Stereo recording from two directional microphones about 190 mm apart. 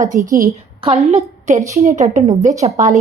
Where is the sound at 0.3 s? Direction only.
45° right (ahead or behind).